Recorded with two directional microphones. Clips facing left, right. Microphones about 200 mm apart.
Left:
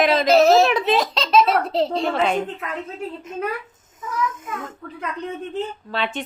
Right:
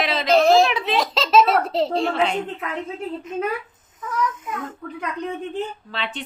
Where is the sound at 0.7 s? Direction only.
45° left (ahead or behind).